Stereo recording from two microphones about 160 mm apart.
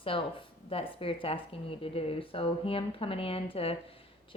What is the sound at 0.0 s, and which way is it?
A woman's voice, 35° left (ahead or behind).